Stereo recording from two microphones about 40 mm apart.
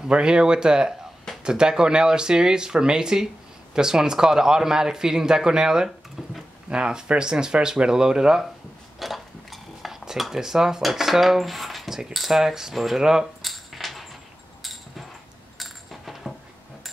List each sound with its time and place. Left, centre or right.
0.1 s a man's voice: right
9.0 s cutlery: centre
10.8 s a man's voice: centre
13.4 s a sound: centre
15.5 s coin: centre